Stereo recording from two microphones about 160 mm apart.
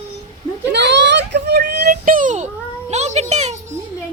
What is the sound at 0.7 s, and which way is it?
A child's voice, 90° right.